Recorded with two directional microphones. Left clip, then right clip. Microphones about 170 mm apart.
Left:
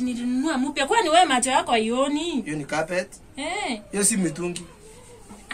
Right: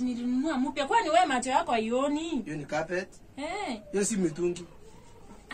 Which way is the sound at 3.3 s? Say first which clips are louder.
Left 6 dB; 15° right (ahead or behind).